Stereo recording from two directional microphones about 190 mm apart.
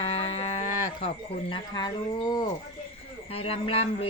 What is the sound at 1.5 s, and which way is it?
A man's voice, 20° left (ahead or behind).